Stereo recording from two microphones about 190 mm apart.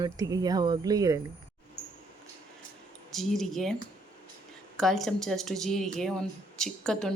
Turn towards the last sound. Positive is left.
turn(degrees=5)  # may be behind; listen again after turning